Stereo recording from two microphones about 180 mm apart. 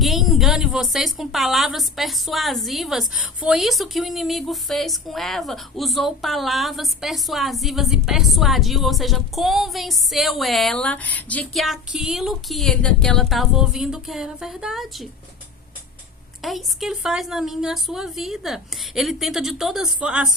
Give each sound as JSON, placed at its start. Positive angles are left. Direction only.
{"t": 0.0, "sound": "a woman's voice", "side_deg": 0}
{"t": 16.4, "sound": "a woman's voice", "side_deg": 0}